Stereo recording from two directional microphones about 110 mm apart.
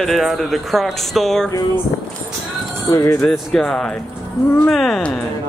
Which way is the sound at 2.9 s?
30° left (ahead or behind).